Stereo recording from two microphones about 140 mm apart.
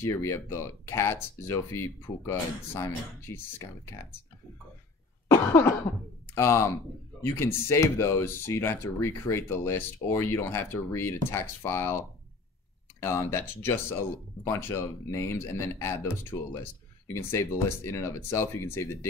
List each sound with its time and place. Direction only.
0.0 s speech: 20° left (ahead or behind)
5.3 s cough: 15° left (ahead or behind)
6.3 s speech: 20° left (ahead or behind)
13.0 s speech: 20° left (ahead or behind)